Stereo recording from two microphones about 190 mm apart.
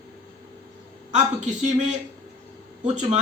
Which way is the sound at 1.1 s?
40° right (ahead or behind).